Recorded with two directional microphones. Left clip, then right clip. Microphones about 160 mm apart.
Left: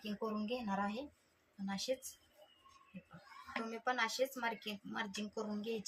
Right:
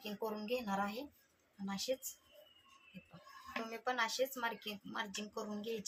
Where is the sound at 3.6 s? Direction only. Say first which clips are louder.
Even; 5° right (ahead or behind).